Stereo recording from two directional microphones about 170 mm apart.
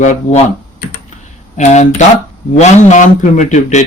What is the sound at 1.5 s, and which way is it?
Speech, 45° left (ahead or behind).